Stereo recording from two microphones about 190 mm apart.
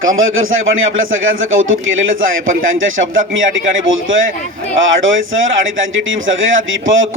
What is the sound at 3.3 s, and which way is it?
Speech, 90° right.